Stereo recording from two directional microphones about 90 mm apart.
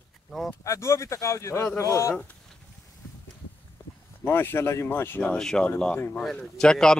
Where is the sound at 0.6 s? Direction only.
35° left (ahead or behind).